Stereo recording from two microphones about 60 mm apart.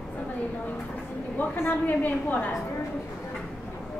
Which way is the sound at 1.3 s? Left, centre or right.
Left.